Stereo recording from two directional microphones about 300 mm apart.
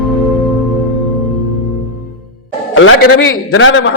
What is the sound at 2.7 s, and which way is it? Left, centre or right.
Music, left.